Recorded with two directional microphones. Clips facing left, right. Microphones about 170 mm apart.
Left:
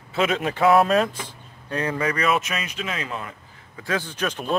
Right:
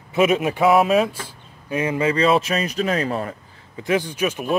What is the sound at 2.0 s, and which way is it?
Speech, 30° right (ahead or behind).